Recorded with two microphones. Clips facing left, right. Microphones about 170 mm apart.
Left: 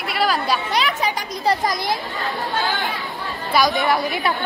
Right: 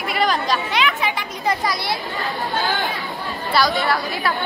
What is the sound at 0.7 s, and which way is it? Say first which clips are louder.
Speech: even; 40° left (ahead or behind).